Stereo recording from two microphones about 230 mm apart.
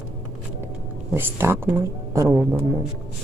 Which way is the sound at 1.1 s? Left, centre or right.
Centre.